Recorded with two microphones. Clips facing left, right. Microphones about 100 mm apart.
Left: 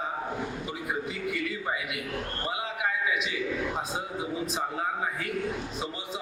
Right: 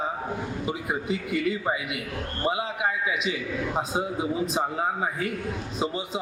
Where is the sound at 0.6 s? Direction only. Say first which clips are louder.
Right 4 dB; 20° right (ahead or behind).